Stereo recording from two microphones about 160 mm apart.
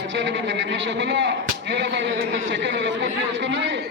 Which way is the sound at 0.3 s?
90° right.